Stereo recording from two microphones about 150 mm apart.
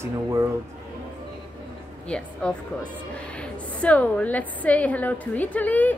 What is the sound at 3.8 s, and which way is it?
A woman's voice, 10° left (ahead or behind).